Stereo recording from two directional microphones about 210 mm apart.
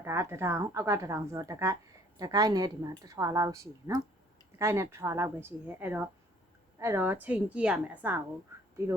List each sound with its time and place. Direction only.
0.0 s a woman's voice: 10° right (ahead or behind)